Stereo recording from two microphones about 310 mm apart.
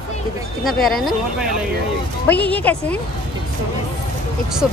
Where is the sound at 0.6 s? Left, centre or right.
Centre.